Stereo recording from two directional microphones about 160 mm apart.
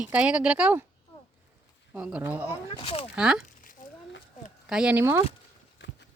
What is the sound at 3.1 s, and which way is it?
Speech, 5° right (ahead or behind).